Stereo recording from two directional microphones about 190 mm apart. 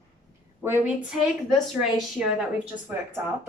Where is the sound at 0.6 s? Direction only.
10° right (ahead or behind).